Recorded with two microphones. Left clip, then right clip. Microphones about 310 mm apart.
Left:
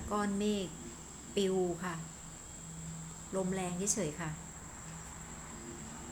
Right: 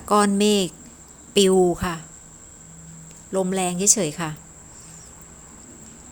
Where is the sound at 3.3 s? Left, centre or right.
Right.